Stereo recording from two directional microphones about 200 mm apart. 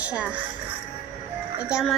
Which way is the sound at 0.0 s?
5° right (ahead or behind).